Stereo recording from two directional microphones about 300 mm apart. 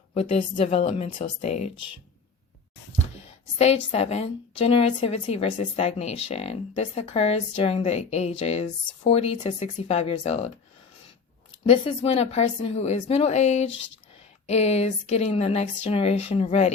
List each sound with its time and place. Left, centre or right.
0.1 s a woman's voice: centre
3.6 s a woman's voice: left
11.9 s a woman's voice: centre